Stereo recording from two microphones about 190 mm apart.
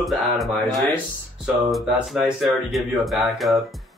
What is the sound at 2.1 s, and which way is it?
Speech, centre (ahead or behind).